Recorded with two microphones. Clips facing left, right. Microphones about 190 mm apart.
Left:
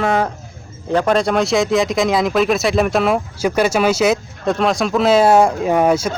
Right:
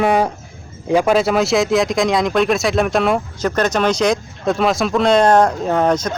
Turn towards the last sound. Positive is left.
turn(degrees=10)  # may be behind; listen again after turning